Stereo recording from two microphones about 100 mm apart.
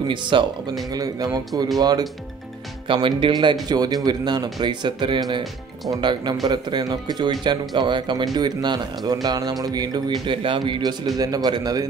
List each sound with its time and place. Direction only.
0.1 s speech: 55° right (ahead or behind)
0.9 s speech: 40° right (ahead or behind)
2.9 s speech: 60° right (ahead or behind)
3.6 s speech: 40° right (ahead or behind)
10.2 s speech: 55° right (ahead or behind); by 11.9 s 40° right (ahead or behind)